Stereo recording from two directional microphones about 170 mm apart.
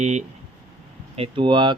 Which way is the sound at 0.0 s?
40° right (ahead or behind).